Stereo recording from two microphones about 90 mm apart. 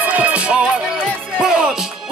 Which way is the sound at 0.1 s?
15° right (ahead or behind).